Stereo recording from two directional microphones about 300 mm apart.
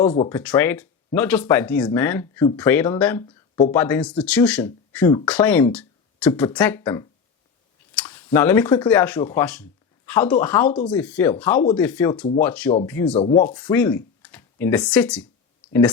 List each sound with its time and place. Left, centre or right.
0.2 s speech: centre
3.2 s a sound: centre
3.7 s speech: centre
13.1 s speech: centre
13.4 s speech: centre